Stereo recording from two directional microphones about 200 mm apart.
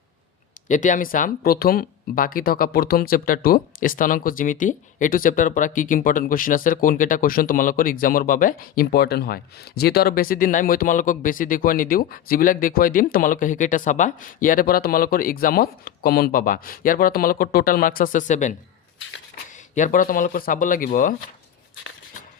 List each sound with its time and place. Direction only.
0.7 s speech: 40° left (ahead or behind)
19.7 s speech: 40° left (ahead or behind)